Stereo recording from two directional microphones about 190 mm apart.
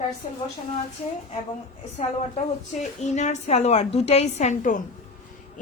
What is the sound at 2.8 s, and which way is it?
A woman's voice, 40° left (ahead or behind).